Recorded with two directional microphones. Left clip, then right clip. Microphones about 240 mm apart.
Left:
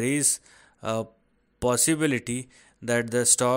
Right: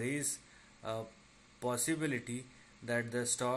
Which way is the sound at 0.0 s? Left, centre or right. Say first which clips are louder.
Left 12 dB; left.